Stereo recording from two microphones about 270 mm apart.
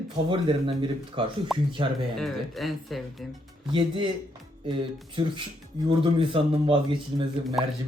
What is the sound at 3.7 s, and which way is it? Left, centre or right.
Speech, centre.